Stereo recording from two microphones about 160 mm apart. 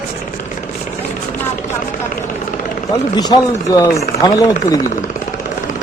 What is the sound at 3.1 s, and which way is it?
Speech, 25° left (ahead or behind).